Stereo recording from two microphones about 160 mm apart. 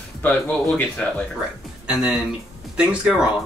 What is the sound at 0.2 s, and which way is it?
Speech, 10° left (ahead or behind).